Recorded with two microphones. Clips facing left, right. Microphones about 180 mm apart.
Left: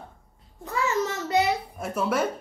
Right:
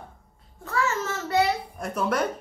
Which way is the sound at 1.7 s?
5° left (ahead or behind).